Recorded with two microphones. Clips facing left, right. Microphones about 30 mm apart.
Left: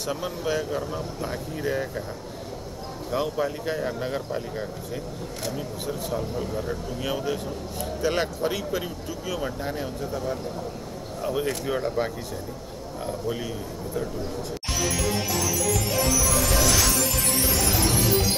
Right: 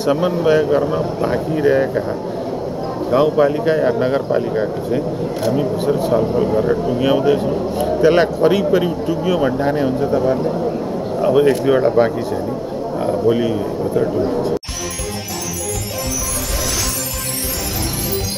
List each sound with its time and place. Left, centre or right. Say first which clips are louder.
0.0 s speech: right 13 dB; right
3.1 s a man's voice: right 13 dB; right
14.1 s speech: right 14 dB; right